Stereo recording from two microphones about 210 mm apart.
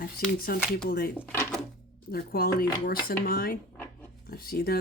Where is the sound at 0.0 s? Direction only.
45° left (ahead or behind).